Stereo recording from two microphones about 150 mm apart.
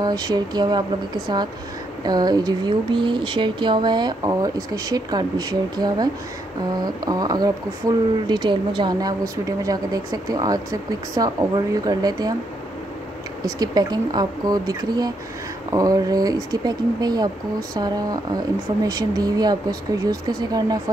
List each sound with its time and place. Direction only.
0.0 s speech: 25° right (ahead or behind)
13.4 s speech: 25° right (ahead or behind)